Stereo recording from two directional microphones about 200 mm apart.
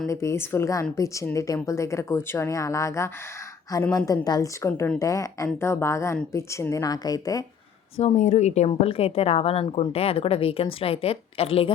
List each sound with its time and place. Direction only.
0.1 s speech: 15° left (ahead or behind)
7.9 s a woman's voice: 35° left (ahead or behind)